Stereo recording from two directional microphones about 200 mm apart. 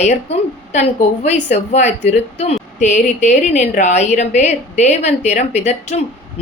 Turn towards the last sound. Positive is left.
turn(degrees=35)  # may be behind; listen again after turning